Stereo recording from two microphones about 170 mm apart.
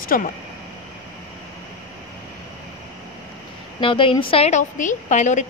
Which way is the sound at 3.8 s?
30° left (ahead or behind).